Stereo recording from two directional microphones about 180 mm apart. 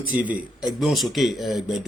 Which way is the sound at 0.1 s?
10° right (ahead or behind).